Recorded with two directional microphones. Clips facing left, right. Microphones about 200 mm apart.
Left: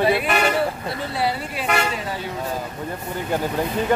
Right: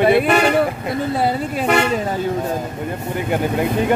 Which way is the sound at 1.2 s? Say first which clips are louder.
Right 5 dB; 45° right (ahead or behind).